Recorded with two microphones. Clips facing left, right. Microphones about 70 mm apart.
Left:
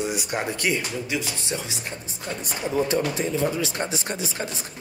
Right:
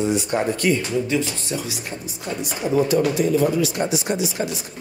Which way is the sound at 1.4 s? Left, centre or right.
Left.